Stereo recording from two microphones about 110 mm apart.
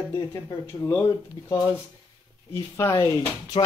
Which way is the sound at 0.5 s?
20° left (ahead or behind).